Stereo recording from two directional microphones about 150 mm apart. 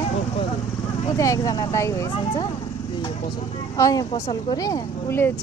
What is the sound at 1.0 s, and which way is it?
Speech, 20° left (ahead or behind).